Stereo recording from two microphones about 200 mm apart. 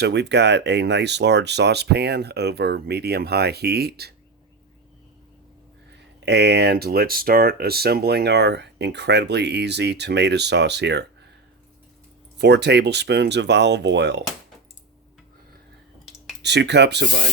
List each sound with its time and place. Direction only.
0.0 s speech: 60° right (ahead or behind)
6.1 s speech: 60° right (ahead or behind)
12.4 s speech: 60° right (ahead or behind)
16.4 s speech: 60° right (ahead or behind)